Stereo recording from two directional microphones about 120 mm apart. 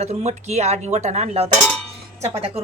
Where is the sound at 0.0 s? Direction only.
65° right (ahead or behind).